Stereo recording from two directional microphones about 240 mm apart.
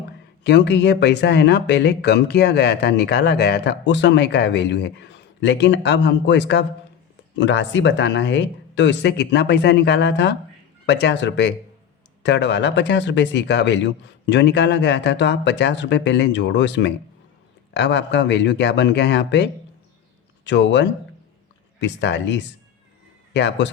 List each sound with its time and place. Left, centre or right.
0.4 s speech: left